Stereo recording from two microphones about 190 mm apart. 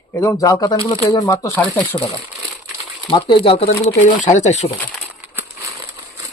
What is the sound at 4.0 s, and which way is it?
Speech, 40° left (ahead or behind).